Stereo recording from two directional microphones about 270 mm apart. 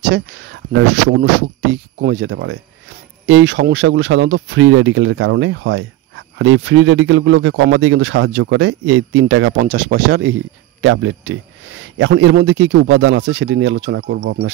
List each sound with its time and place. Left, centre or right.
0.1 s speech: right
10.8 s speech: right